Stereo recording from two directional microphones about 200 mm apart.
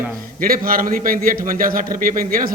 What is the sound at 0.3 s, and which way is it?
A man's voice, 45° right (ahead or behind).